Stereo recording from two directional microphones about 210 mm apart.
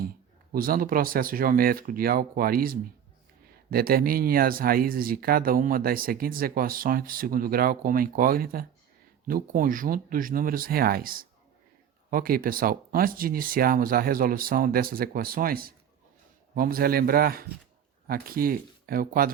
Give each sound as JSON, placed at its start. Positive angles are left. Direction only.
{"t": 0.5, "sound": "speech", "side_deg": -45}